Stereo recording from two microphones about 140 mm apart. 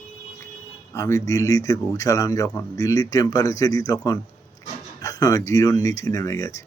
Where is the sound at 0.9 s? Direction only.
25° left (ahead or behind).